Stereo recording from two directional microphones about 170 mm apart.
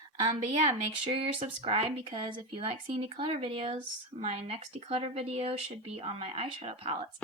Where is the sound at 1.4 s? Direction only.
35° right (ahead or behind).